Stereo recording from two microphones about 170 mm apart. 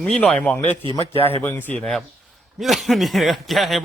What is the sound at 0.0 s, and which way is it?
A man's voice, 5° left (ahead or behind).